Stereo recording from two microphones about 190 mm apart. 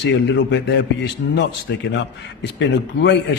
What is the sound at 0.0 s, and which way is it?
A man's voice, 65° left (ahead or behind).